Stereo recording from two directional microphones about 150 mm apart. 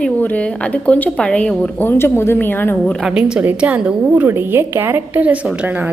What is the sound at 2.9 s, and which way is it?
A woman's voice, 5° right (ahead or behind).